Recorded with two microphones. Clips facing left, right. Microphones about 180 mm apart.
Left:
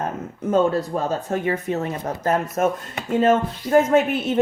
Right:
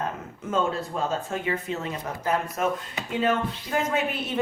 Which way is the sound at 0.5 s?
40° left (ahead or behind).